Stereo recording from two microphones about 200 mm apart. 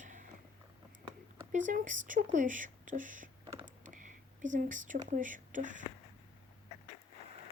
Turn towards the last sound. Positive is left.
turn(degrees=-40)  # may be behind; listen again after turning